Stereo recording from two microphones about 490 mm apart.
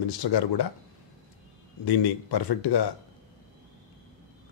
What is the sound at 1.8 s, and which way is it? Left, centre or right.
Speech, left.